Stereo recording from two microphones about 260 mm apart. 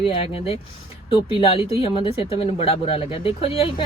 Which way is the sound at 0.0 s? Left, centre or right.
Left.